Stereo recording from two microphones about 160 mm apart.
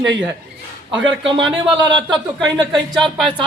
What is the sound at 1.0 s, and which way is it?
Speech, 30° right (ahead or behind).